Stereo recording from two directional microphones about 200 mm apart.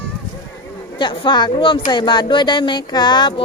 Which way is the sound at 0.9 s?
25° left (ahead or behind).